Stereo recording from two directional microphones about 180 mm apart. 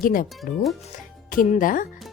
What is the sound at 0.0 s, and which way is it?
Speech, 50° left (ahead or behind).